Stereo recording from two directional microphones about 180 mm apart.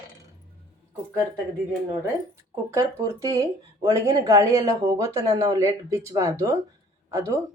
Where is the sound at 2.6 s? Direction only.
15° right (ahead or behind).